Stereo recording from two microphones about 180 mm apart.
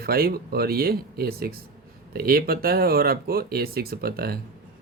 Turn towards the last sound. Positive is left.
turn(degrees=-55)  # may be behind; listen again after turning